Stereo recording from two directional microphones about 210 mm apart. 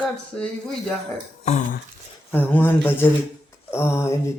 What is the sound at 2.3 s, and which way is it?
Speech, 10° left (ahead or behind).